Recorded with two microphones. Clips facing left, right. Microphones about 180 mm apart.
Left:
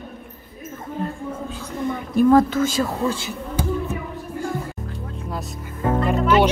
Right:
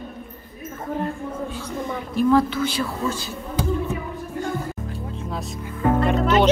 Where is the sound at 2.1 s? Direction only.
45° left (ahead or behind).